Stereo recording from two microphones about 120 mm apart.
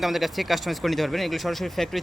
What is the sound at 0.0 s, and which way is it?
Speech, centre (ahead or behind).